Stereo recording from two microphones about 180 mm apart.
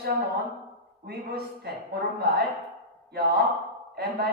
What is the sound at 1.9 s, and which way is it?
Speech, 60° right (ahead or behind).